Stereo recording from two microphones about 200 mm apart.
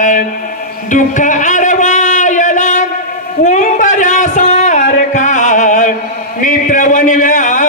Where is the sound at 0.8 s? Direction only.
40° left (ahead or behind).